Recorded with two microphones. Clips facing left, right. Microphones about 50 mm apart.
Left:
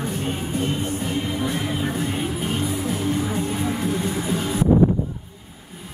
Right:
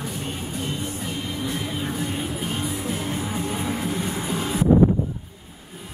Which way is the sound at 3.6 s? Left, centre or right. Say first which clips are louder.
Left 3 dB; centre.